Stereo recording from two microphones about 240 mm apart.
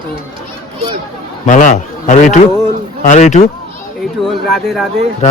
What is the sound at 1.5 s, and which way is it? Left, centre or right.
A man's voice, left.